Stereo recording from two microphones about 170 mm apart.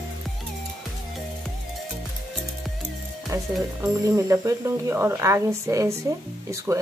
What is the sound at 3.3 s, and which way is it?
Speech, 20° right (ahead or behind).